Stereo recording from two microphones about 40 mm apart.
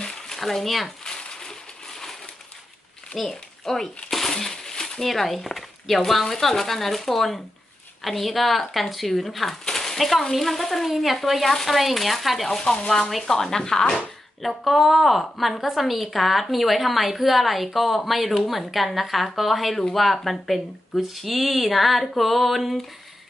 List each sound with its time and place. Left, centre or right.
0.0 s a sound: centre
0.4 s a woman's voice: centre
1.0 s a sound: centre
3.2 s speech: centre
4.1 s coin: centre
5.0 s a woman's voice: centre
9.7 s a sound: centre
10.3 s a woman's voice: centre
12.4 s speech: centre
14.4 s a woman's voice: centre